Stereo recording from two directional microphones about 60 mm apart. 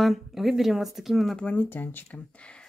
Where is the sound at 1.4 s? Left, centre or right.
Left.